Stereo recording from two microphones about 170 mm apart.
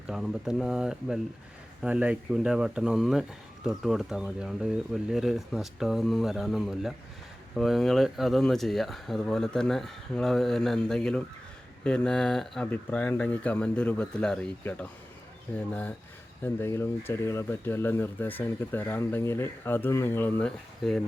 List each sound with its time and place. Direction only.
0.1 s speech: centre (ahead or behind)